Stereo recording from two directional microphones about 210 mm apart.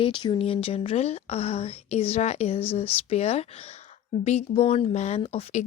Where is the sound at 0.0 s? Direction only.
20° left (ahead or behind).